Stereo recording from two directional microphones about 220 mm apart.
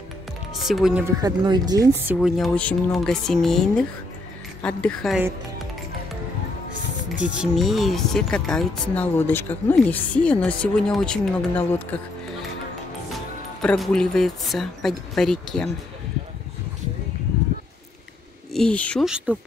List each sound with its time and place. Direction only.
0.6 s speech: centre (ahead or behind)
1.2 s speech: 15° right (ahead or behind)
2.1 s speech: centre (ahead or behind)
7.3 s speech: centre (ahead or behind)
18.5 s speech: 5° left (ahead or behind)